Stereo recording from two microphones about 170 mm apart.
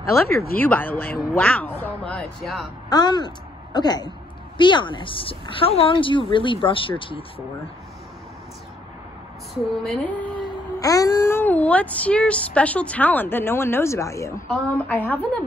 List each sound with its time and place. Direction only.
0.6 s speech: 10° left (ahead or behind)
2.9 s a woman's voice: 25° left (ahead or behind)
9.5 s a sound: centre (ahead or behind)
10.4 s speech: 20° left (ahead or behind)